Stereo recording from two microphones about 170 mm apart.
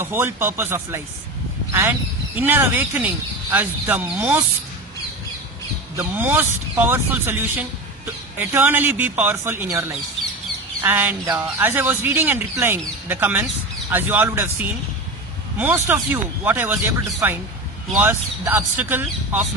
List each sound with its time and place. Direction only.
0.0 s speech: 15° right (ahead or behind)
5.9 s speech: 10° right (ahead or behind)
15.5 s speech: 10° right (ahead or behind)